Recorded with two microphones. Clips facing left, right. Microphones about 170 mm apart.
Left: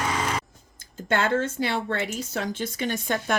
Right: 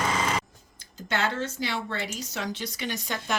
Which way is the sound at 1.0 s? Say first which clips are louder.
Left 5 dB; 50° left (ahead or behind).